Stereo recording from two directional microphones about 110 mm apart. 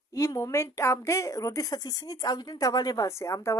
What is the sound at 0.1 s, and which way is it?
A woman's voice, 30° left (ahead or behind).